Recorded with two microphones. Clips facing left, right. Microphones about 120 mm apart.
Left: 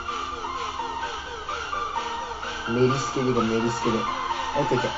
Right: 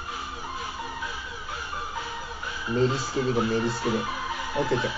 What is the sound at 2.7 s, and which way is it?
Speech, 35° left (ahead or behind).